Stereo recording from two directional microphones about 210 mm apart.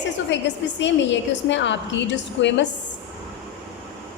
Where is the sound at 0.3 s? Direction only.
60° left (ahead or behind).